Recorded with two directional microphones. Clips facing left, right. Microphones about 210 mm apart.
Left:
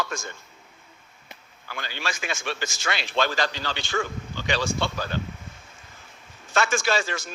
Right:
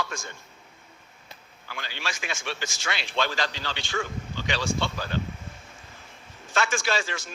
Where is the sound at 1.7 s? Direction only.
45° left (ahead or behind).